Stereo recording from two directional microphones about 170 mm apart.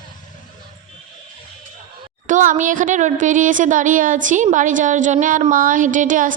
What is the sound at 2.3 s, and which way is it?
A woman's voice, 50° right (ahead or behind).